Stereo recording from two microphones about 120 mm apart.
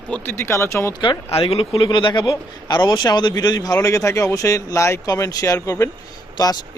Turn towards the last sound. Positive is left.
turn(degrees=35)  # may be behind; listen again after turning